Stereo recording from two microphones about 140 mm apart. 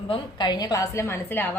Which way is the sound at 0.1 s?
30° left (ahead or behind).